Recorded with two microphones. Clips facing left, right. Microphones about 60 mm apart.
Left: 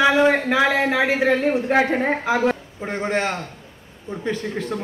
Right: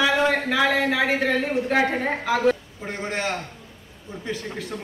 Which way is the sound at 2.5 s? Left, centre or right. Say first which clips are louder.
Right 1 dB; left.